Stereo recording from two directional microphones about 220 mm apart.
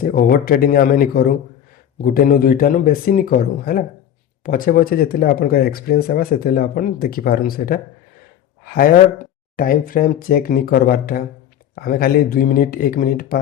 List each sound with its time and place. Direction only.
0.0 s speech: 40° left (ahead or behind)